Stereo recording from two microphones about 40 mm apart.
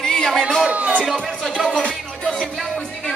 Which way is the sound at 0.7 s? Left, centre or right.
Right.